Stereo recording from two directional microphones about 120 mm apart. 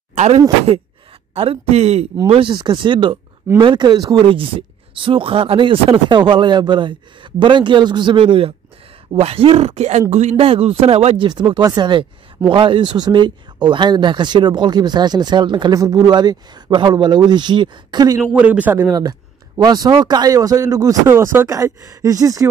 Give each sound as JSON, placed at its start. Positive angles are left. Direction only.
{"t": 0.1, "sound": "a sound", "side_deg": -65}
{"t": 1.3, "sound": "speech", "side_deg": -55}
{"t": 2.2, "sound": "speech", "side_deg": -50}
{"t": 2.5, "sound": "speech", "side_deg": -40}
{"t": 10.3, "sound": "speech", "side_deg": -50}
{"t": 11.2, "sound": "speech", "side_deg": -40}
{"t": 18.2, "sound": "speech", "side_deg": -10}
{"t": 18.9, "sound": "speech", "side_deg": -30}